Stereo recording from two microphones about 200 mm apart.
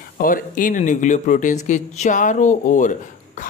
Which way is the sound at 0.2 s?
45° left (ahead or behind).